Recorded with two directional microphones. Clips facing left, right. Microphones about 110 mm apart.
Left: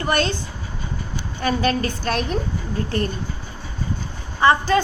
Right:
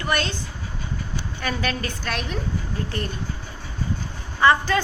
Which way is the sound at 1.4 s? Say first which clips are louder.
Left 7 dB; 30° left (ahead or behind).